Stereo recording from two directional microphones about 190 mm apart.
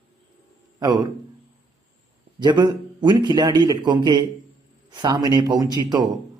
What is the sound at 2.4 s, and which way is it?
A man's voice, 20° right (ahead or behind).